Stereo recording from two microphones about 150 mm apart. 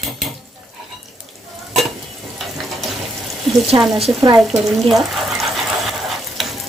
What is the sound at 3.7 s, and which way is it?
Speech, 25° right (ahead or behind).